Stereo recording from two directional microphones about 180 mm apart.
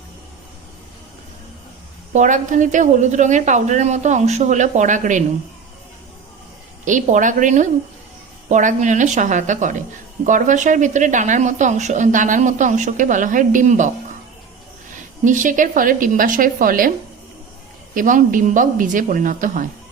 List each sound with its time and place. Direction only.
2.1 s a woman's voice: 45° right (ahead or behind)
6.8 s a woman's voice: 45° right (ahead or behind)
15.2 s a woman's voice: 45° right (ahead or behind)
17.9 s a woman's voice: 45° right (ahead or behind)